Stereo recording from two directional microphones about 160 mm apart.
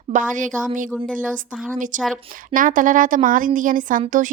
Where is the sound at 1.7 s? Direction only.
55° right (ahead or behind).